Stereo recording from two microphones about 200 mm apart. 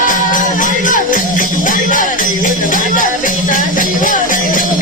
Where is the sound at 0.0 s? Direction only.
40° left (ahead or behind).